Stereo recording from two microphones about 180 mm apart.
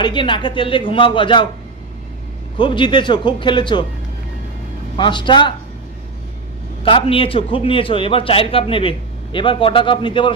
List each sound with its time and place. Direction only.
0.0 s a man's voice: 25° left (ahead or behind)
2.6 s a man's voice: 25° left (ahead or behind)
4.9 s a man's voice: 25° left (ahead or behind)
6.8 s a man's voice: 30° left (ahead or behind)